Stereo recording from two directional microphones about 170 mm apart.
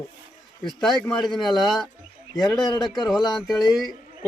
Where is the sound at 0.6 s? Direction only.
Centre (ahead or behind).